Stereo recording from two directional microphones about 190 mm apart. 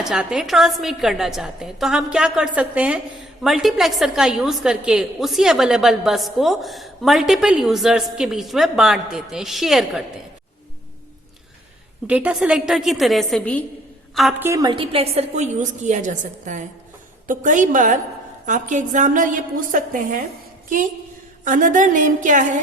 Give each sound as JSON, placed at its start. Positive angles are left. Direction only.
{"t": 0.0, "sound": "a woman's voice", "side_deg": -5}
{"t": 12.0, "sound": "a woman's voice", "side_deg": -5}
{"t": 14.4, "sound": "a woman's voice", "side_deg": -20}
{"t": 21.4, "sound": "a woman's voice", "side_deg": -45}